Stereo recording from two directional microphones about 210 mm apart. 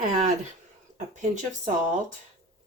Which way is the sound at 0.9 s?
35° right (ahead or behind).